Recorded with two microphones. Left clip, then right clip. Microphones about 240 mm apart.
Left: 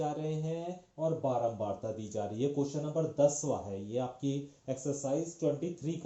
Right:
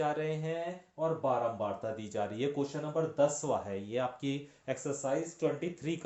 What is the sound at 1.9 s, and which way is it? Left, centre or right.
Speech, right.